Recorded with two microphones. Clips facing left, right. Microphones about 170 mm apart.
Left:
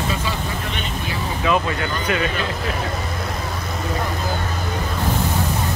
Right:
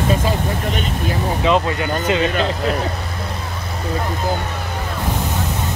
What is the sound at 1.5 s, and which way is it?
Speech, 20° right (ahead or behind).